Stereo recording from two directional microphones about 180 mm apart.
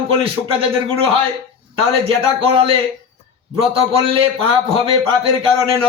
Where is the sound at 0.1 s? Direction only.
30° right (ahead or behind).